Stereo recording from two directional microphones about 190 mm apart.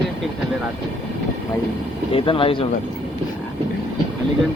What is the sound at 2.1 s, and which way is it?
Speech, 30° left (ahead or behind).